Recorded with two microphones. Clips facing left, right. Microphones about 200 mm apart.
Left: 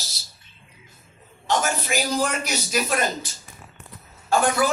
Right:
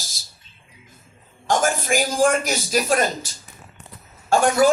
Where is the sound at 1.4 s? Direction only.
50° right (ahead or behind).